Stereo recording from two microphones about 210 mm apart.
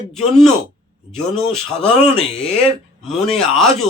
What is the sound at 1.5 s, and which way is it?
Speech, 5° left (ahead or behind).